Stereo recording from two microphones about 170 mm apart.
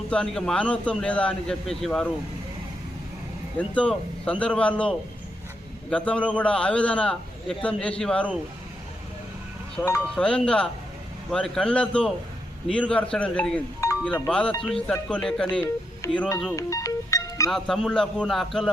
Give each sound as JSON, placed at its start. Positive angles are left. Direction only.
{"t": 0.1, "sound": "a man's voice", "side_deg": 5}
{"t": 3.6, "sound": "a man's voice", "side_deg": 5}
{"t": 9.8, "sound": "a man's voice", "side_deg": 5}
{"t": 16.6, "sound": "music", "side_deg": 20}
{"t": 17.5, "sound": "a man's voice", "side_deg": 0}